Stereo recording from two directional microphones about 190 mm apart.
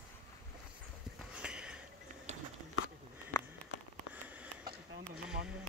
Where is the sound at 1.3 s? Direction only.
5° right (ahead or behind).